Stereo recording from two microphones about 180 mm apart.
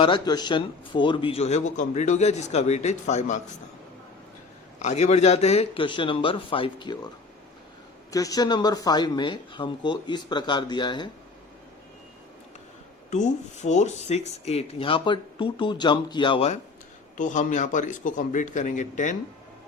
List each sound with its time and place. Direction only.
0.0 s a man's voice: 25° left (ahead or behind); by 3.4 s 40° left (ahead or behind)
4.8 s a man's voice: 40° left (ahead or behind); by 7.1 s 25° left (ahead or behind)
8.1 s speech: 20° left (ahead or behind)
13.1 s speech: 40° left (ahead or behind)
17.2 s a man's voice: 45° left (ahead or behind)